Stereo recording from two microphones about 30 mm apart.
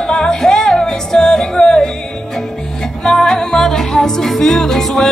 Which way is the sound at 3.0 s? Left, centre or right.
Centre.